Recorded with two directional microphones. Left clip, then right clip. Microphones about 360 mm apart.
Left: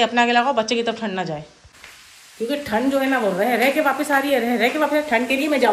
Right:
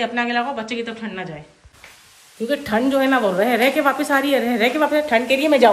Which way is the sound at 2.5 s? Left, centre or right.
Centre.